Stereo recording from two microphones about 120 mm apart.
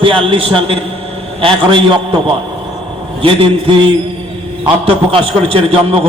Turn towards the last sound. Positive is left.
turn(degrees=-50)  # may be behind; listen again after turning